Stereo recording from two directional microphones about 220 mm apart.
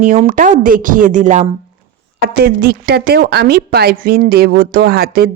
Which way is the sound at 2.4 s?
45° right (ahead or behind).